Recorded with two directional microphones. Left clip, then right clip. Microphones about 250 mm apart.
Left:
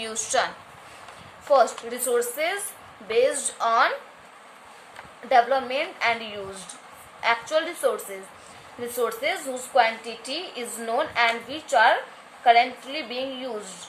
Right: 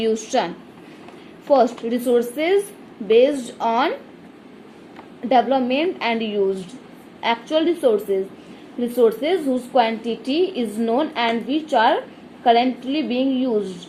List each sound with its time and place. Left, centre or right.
0.0 s a woman's voice: centre
5.3 s a woman's voice: centre